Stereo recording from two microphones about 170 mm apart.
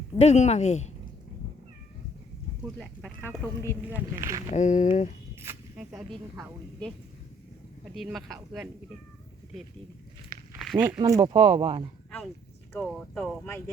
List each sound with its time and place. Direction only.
0.2 s speech: 40° left (ahead or behind)
2.7 s speech: 5° left (ahead or behind)
3.8 s speech: 10° right (ahead or behind)
4.5 s speech: 45° left (ahead or behind)
5.4 s a sound: 15° right (ahead or behind)
7.9 s speech: centre (ahead or behind)
10.6 s a sound: centre (ahead or behind)
10.8 s speech: 15° right (ahead or behind)
11.2 s speech: 30° right (ahead or behind)
12.7 s speech: centre (ahead or behind)